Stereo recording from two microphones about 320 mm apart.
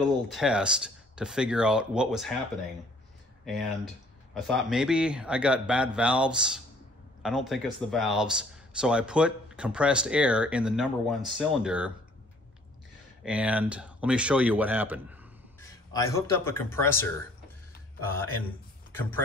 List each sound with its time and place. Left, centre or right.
0.3 s speech: centre
3.4 s speech: centre
13.2 s speech: centre
15.6 s speech: centre